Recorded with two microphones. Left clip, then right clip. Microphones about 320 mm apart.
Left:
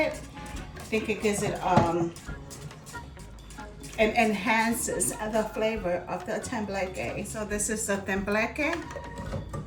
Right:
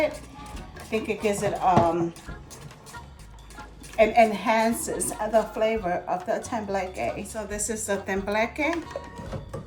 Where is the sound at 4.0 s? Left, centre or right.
Centre.